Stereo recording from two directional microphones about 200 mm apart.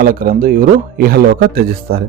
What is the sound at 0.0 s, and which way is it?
Speech, 45° right (ahead or behind).